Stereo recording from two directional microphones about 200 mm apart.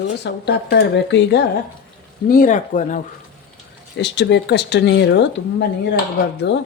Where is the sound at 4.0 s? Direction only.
60° left (ahead or behind).